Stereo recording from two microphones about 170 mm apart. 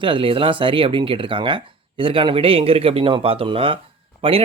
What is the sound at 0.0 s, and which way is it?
Speech, 30° right (ahead or behind).